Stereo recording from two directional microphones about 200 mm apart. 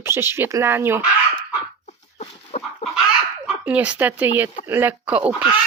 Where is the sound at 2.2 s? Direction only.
30° left (ahead or behind).